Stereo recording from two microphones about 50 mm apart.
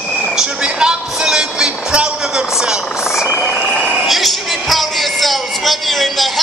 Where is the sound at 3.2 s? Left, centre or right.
Left.